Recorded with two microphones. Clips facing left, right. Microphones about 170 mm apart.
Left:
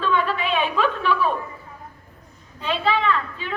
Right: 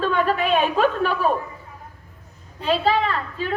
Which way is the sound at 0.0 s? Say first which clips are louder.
Right 2 dB; 45° right (ahead or behind).